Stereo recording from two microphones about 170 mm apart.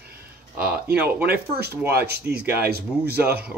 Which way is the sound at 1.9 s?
70° right (ahead or behind).